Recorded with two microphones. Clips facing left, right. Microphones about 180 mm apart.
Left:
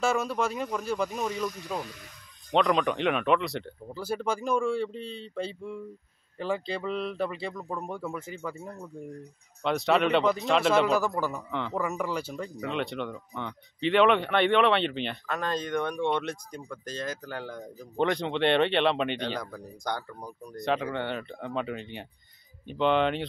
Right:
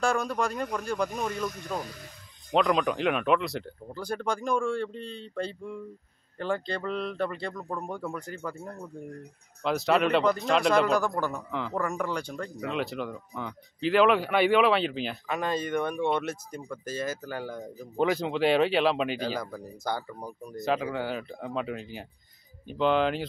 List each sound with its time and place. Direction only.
0.0 s speech: 5° left (ahead or behind)